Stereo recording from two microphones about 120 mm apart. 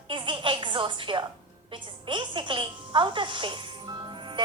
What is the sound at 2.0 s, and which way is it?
A woman's voice, 45° right (ahead or behind).